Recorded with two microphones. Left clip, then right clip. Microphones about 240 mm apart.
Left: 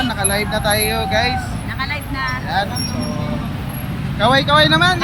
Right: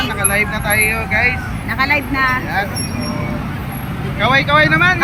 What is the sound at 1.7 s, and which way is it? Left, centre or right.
Speech, centre.